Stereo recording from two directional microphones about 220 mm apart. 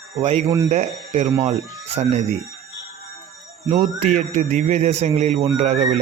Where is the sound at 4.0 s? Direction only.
30° right (ahead or behind).